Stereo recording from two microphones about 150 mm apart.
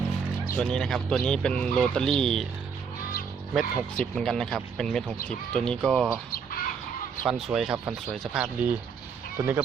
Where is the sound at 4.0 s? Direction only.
5° left (ahead or behind).